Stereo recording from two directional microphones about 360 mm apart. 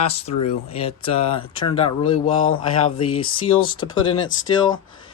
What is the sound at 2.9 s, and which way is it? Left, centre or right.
Speech, left.